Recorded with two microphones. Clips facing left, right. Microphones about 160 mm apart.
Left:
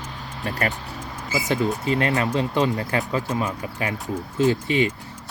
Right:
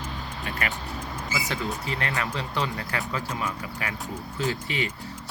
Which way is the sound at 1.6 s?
25° left (ahead or behind).